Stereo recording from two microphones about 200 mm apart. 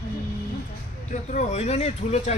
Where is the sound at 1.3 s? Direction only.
35° left (ahead or behind).